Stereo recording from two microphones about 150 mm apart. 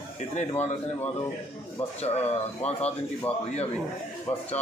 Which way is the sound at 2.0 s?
45° left (ahead or behind).